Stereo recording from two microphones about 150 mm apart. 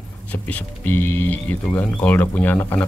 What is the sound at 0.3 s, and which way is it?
Speech, 10° left (ahead or behind).